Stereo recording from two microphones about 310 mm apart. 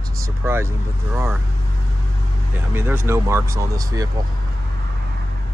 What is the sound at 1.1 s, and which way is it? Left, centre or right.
Speech, centre.